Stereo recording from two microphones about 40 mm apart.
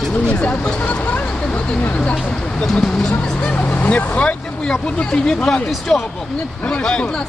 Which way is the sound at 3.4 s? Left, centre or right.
Left.